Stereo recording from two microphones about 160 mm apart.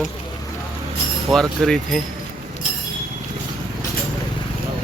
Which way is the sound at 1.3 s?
Centre (ahead or behind).